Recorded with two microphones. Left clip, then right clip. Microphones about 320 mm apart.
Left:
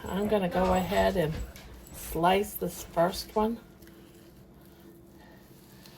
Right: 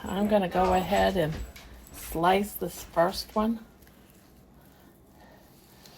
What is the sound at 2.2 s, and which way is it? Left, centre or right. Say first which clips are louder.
Speech: right 1 dB; right.